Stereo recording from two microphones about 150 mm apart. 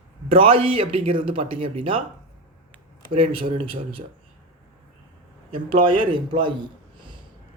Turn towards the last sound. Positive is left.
turn(degrees=-30)  # may be behind; listen again after turning